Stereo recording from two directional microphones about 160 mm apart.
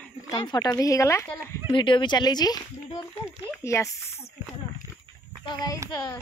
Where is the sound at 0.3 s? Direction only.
25° left (ahead or behind).